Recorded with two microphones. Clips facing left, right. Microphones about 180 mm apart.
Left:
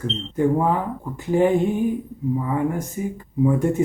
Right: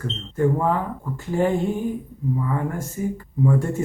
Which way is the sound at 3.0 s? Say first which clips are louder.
Even; 15° left (ahead or behind).